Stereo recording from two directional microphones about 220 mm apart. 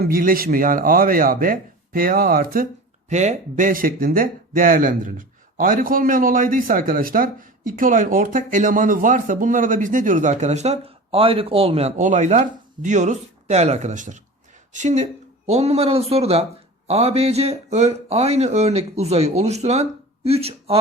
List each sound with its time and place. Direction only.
0.0 s speech: 40° right (ahead or behind)